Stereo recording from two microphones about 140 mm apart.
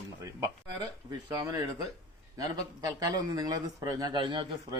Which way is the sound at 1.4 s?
25° right (ahead or behind).